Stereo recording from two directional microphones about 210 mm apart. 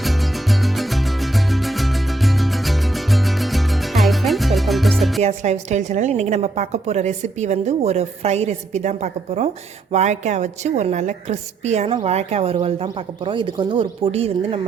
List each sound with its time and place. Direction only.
0.6 s music: centre (ahead or behind)
5.2 s a woman's voice: 30° right (ahead or behind)